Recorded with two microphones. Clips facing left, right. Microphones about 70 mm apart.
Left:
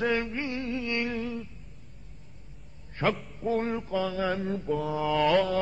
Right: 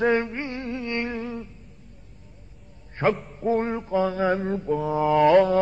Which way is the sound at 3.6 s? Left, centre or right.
Right.